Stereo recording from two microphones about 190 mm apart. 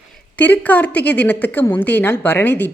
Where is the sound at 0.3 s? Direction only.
10° left (ahead or behind).